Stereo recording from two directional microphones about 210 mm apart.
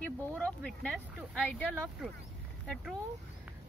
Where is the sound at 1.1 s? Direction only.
5° left (ahead or behind).